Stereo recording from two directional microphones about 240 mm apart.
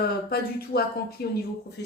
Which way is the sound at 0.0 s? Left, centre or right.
Left.